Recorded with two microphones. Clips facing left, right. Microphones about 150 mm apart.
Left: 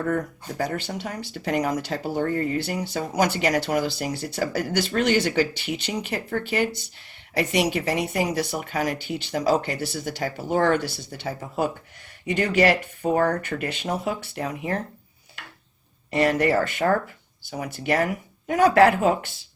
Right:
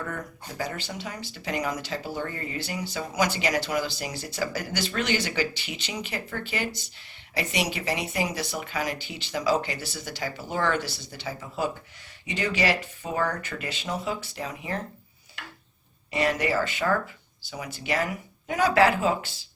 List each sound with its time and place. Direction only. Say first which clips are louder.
0.0 s speech: left 9 dB; 45° left (ahead or behind)
2.6 s speech: left 5 dB; 55° left (ahead or behind)
16.1 s speech: left 5 dB; 55° left (ahead or behind)